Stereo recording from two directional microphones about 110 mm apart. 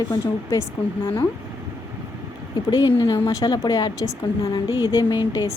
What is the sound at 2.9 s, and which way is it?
Speech, 30° left (ahead or behind).